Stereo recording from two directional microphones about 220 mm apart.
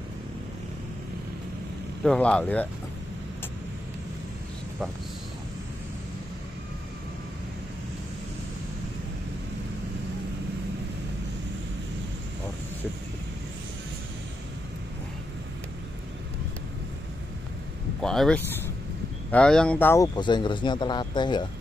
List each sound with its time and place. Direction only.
2.0 s speech: 5° left (ahead or behind)
18.0 s speech: centre (ahead or behind); by 21.5 s 20° left (ahead or behind)